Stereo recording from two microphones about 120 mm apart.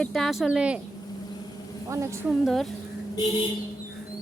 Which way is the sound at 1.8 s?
25° right (ahead or behind).